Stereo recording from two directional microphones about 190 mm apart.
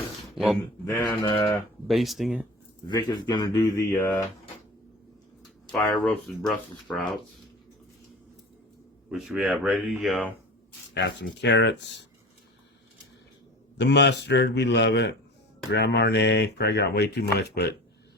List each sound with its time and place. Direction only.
0.3 s speech: centre (ahead or behind)
0.9 s mantra: 20° left (ahead or behind)
1.9 s speech: centre (ahead or behind)
2.8 s speech: 20° left (ahead or behind)
5.7 s speech: 5° left (ahead or behind)
9.0 s speech: 5° right (ahead or behind)
10.9 s speech: 65° left (ahead or behind)
13.7 s speech: 65° left (ahead or behind)